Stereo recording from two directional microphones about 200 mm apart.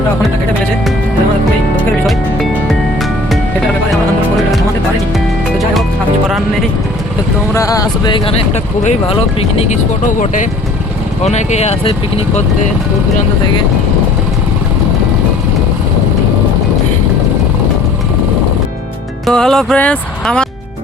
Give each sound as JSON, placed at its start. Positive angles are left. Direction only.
{"t": 6.2, "sound": "music", "side_deg": 0}
{"t": 7.5, "sound": "speech", "side_deg": 15}
{"t": 19.2, "sound": "speech", "side_deg": 0}